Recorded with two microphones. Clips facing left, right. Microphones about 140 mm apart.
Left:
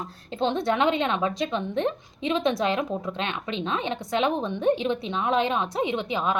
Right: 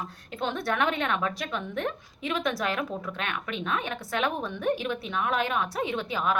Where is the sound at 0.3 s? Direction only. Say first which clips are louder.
Left 5 dB; 25° left (ahead or behind).